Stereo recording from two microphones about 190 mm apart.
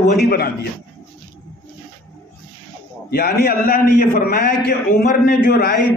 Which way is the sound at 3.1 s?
55° left (ahead or behind).